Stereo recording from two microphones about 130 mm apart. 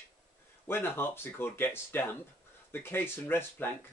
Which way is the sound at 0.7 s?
20° left (ahead or behind).